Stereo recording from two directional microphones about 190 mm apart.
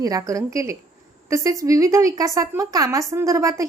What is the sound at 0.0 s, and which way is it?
A woman's voice, 20° right (ahead or behind).